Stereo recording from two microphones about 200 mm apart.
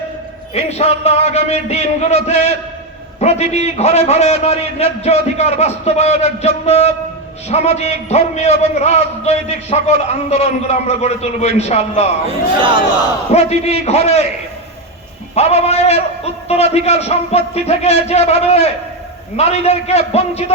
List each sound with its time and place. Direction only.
0.5 s a man's voice: 30° left (ahead or behind)
12.5 s speech: 25° right (ahead or behind)
13.3 s a man's voice: 35° left (ahead or behind)
15.4 s a man's voice: 30° left (ahead or behind)